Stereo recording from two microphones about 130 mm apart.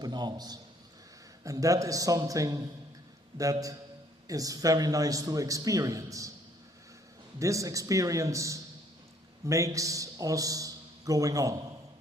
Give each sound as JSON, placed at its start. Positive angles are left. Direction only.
{"t": 0.0, "sound": "a man's voice", "side_deg": -30}
{"t": 7.3, "sound": "a man's voice", "side_deg": -25}